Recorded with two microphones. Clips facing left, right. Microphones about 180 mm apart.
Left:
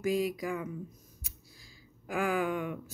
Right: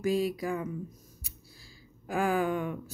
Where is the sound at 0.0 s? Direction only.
30° right (ahead or behind).